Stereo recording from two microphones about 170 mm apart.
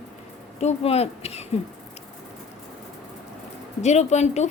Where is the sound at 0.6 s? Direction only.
35° left (ahead or behind).